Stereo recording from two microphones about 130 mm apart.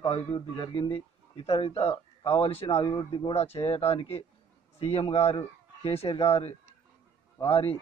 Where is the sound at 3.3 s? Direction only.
50° left (ahead or behind).